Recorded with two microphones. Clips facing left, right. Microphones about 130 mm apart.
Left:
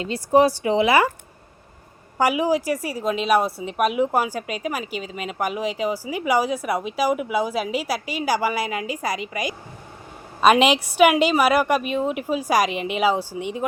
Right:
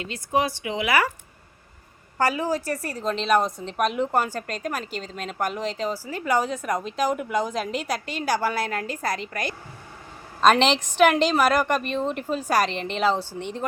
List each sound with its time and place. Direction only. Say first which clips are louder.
0.0 s a woman's voice: left 7 dB; 35° left (ahead or behind)
2.1 s a woman's voice: left 4 dB; 10° left (ahead or behind)